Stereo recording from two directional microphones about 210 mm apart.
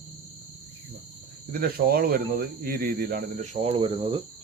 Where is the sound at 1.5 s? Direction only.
45° right (ahead or behind); by 4.2 s 25° right (ahead or behind).